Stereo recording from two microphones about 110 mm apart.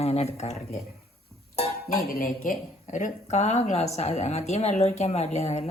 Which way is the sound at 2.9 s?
90° left.